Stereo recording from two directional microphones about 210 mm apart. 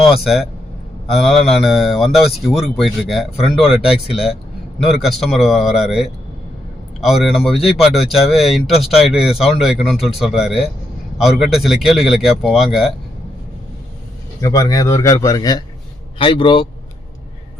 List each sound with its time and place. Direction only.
0.0 s speech: centre (ahead or behind)
14.4 s a man's voice: 15° left (ahead or behind)